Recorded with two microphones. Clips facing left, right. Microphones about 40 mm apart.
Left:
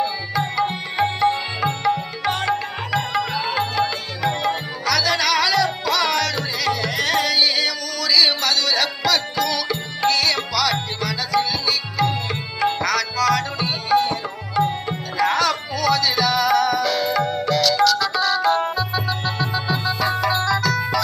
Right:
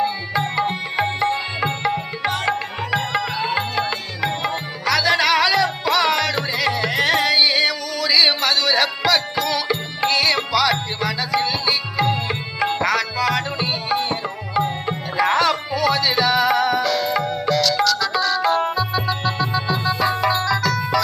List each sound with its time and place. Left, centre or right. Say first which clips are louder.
0.0 s music: right 1 dB; centre
1.6 s music: left 3 dB; centre
16.8 s music: even; centre
20.0 s music: right 2 dB; centre
20.3 s music: even; centre